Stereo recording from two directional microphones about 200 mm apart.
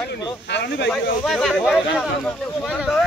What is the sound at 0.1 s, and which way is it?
Speech, 60° left (ahead or behind).